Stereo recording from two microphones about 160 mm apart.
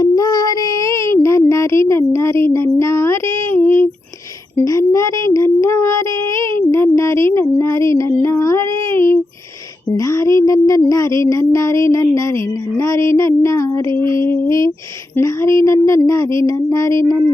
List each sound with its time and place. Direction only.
0.0 s child singing: 25° left (ahead or behind)
4.6 s speech: 20° left (ahead or behind)
6.6 s a sound: 15° left (ahead or behind)
9.9 s speech: 20° left (ahead or behind)